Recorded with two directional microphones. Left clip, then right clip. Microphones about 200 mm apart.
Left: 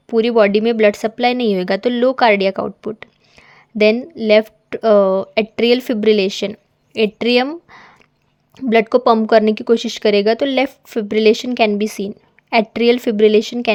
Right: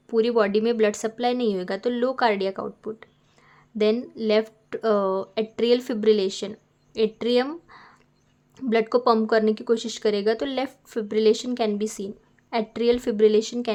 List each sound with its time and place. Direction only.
0.1 s speech: 25° left (ahead or behind)
3.9 s speech: 20° left (ahead or behind)
7.4 s a sound: 25° left (ahead or behind)
8.5 s speech: 25° left (ahead or behind)